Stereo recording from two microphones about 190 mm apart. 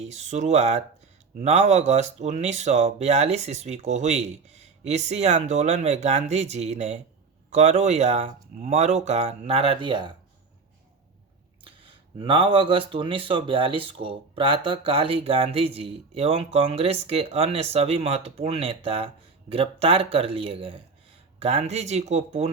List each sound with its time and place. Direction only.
0.0 s speech: 35° right (ahead or behind)
11.6 s speech: 25° right (ahead or behind)